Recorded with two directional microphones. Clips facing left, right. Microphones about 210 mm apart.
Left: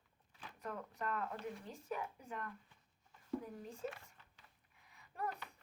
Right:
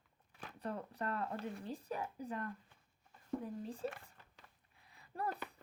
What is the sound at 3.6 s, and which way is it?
Speech, 30° right (ahead or behind).